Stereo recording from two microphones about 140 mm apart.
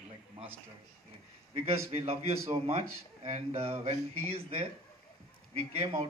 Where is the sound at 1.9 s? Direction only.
45° right (ahead or behind).